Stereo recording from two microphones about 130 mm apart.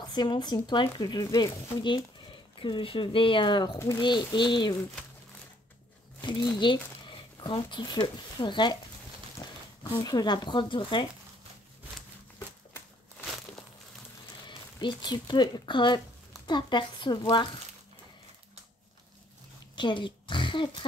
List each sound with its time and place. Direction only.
0.1 s speech: 35° left (ahead or behind)
3.7 s speech: 20° left (ahead or behind)
4.0 s speech: 35° left (ahead or behind)
6.2 s speech: 35° left (ahead or behind)
14.4 s speech: 35° left (ahead or behind)
19.7 s a woman's voice: 35° left (ahead or behind)